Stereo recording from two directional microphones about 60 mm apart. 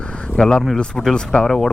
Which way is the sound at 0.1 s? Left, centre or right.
Centre.